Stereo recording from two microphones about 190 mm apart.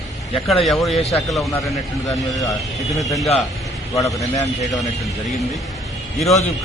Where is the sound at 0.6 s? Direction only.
Centre (ahead or behind).